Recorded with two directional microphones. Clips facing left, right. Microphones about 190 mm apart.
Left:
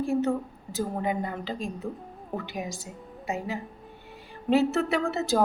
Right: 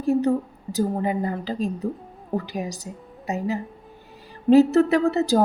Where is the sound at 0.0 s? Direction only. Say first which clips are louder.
Right 5 dB; 40° right (ahead or behind).